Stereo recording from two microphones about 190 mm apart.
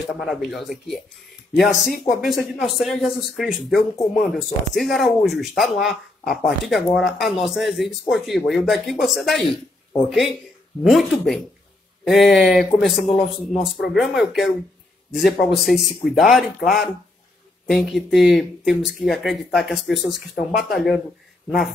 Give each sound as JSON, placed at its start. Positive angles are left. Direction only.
{"t": 0.1, "sound": "speech", "side_deg": 0}